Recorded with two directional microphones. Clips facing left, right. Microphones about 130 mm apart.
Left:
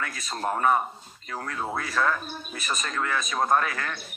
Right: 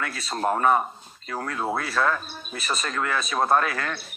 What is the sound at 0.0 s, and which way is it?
Speech, 30° right (ahead or behind).